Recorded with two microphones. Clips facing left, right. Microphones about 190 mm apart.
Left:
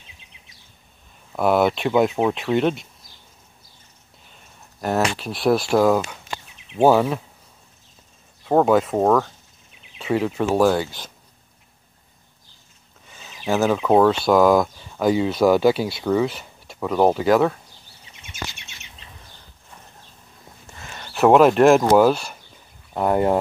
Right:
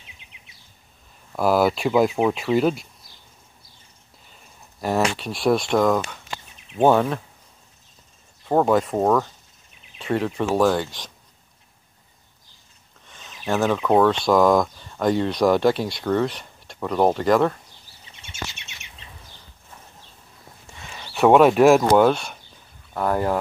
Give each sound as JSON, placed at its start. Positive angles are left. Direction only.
{"t": 0.2, "sound": "a sound", "side_deg": -15}
{"t": 1.3, "sound": "speech", "side_deg": 0}
{"t": 4.7, "sound": "speech", "side_deg": 0}
{"t": 8.5, "sound": "speech", "side_deg": 0}
{"t": 13.0, "sound": "speech", "side_deg": 5}
{"t": 20.7, "sound": "speech", "side_deg": 0}
{"t": 22.9, "sound": "speech", "side_deg": 20}